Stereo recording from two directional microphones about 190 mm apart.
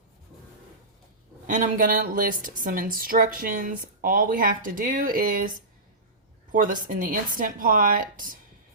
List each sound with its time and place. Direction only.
1.5 s a woman's voice: 45° right (ahead or behind)